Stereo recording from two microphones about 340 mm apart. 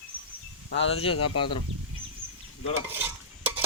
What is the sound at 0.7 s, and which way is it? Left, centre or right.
Speech, left.